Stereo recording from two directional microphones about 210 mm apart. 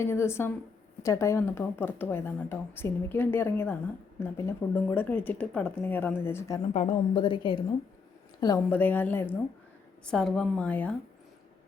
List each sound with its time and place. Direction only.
0.0 s speech: 10° left (ahead or behind)
6.7 s a woman's voice: 25° left (ahead or behind); by 10.9 s 5° left (ahead or behind)